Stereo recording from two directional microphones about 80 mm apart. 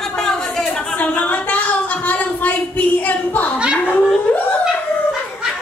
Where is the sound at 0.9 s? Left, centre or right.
Centre.